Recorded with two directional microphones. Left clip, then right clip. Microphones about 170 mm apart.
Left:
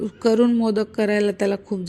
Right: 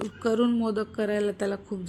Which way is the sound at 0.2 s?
35° left (ahead or behind).